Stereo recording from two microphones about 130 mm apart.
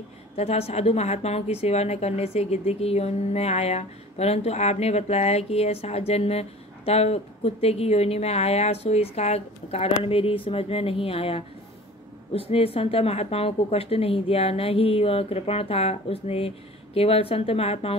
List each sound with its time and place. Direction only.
0.4 s a woman's voice: 55° left (ahead or behind)